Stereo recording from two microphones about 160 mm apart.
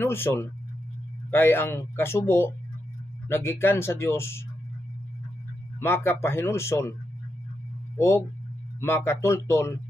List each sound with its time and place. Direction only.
0.0 s speech: 15° left (ahead or behind)
5.8 s speech: 15° left (ahead or behind)
8.8 s speech: 15° left (ahead or behind)